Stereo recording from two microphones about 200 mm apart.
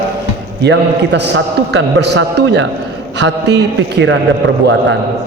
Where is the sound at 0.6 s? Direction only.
60° right (ahead or behind).